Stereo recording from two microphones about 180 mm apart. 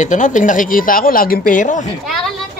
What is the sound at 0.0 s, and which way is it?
Speech, 45° left (ahead or behind).